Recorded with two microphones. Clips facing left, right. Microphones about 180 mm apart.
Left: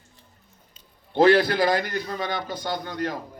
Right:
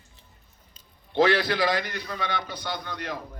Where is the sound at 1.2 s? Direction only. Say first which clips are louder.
Left 4 dB; 50° left (ahead or behind).